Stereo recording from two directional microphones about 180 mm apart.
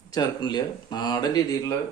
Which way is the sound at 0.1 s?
25° left (ahead or behind).